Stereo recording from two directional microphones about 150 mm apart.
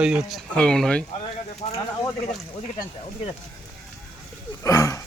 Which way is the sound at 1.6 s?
40° left (ahead or behind).